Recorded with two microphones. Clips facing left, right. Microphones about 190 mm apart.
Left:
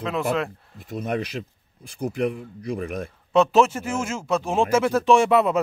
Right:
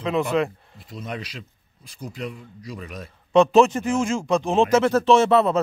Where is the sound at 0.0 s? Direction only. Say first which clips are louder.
Right 2 dB; centre (ahead or behind).